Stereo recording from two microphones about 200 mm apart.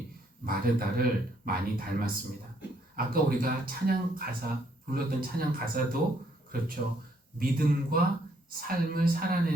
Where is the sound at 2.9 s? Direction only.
45° right (ahead or behind).